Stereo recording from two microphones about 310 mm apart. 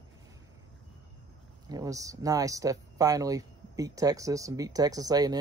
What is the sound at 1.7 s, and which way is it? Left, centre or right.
Speech, centre.